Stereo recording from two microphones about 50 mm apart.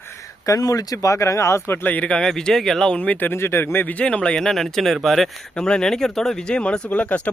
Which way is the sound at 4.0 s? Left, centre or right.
Left.